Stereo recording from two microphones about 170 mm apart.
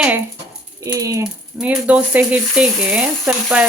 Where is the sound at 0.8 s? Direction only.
20° right (ahead or behind).